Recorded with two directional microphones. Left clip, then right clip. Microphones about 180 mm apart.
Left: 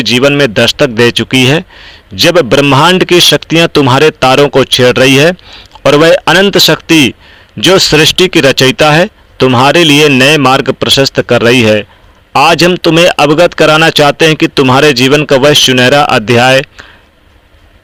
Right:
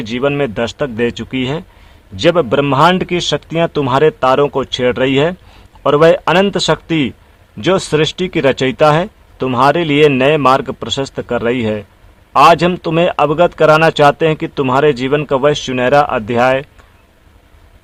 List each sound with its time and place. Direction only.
0.0 s a man's voice: 20° left (ahead or behind)